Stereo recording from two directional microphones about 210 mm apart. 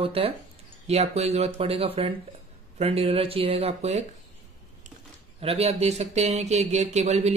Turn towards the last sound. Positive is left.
turn(degrees=-30)  # may be behind; listen again after turning